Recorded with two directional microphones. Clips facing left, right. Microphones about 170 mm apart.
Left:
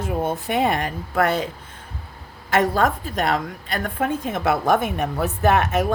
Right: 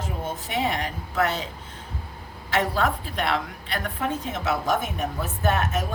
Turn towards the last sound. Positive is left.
turn(degrees=70)  # may be behind; listen again after turning